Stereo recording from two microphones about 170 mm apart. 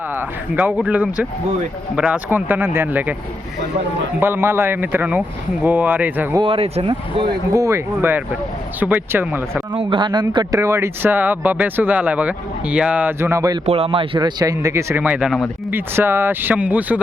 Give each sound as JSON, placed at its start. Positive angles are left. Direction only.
{"t": 0.2, "sound": "speech", "side_deg": -10}
{"t": 4.2, "sound": "speech", "side_deg": -15}
{"t": 6.4, "sound": "speech", "side_deg": -35}
{"t": 7.5, "sound": "speech", "side_deg": -15}
{"t": 9.7, "sound": "speech", "side_deg": -30}
{"t": 13.7, "sound": "speech", "side_deg": -35}